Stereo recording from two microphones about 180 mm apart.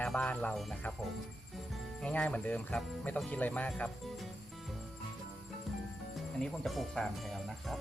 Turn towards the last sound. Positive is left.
turn(degrees=0)  # may be behind; listen again after turning